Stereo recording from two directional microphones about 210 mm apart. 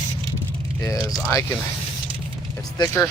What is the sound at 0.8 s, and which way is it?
Speech, 20° left (ahead or behind).